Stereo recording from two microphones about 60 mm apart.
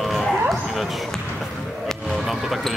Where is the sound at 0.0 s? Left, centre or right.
Centre.